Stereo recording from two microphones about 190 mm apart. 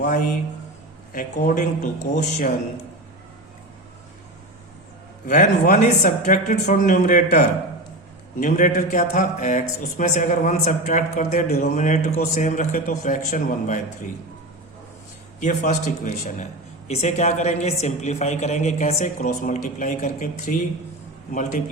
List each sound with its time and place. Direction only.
0.0 s speech: 40° left (ahead or behind)
5.2 s speech: 40° left (ahead or behind)
15.4 s speech: 40° left (ahead or behind)